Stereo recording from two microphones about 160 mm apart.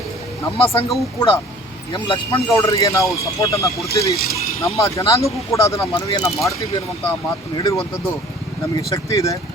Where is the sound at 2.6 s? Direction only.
20° left (ahead or behind).